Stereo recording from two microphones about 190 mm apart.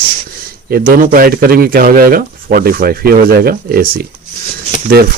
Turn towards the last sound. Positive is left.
turn(degrees=-55)  # may be behind; listen again after turning